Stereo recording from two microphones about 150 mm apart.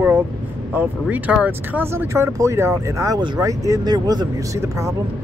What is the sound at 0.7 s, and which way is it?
Speech, 10° right (ahead or behind).